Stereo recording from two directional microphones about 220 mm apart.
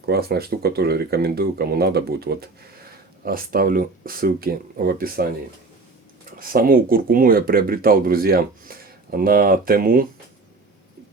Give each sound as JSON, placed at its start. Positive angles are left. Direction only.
{"t": 0.0, "sound": "speech", "side_deg": -45}
{"t": 6.4, "sound": "speech", "side_deg": -40}